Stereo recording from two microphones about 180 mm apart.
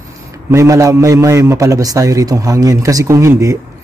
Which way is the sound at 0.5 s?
15° right (ahead or behind).